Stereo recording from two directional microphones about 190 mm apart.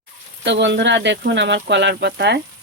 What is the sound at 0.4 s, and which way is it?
Speech, 65° right (ahead or behind).